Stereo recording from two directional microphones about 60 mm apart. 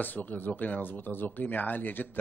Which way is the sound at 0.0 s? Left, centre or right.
Left.